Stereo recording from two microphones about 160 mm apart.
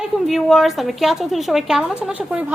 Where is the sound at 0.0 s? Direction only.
Centre (ahead or behind).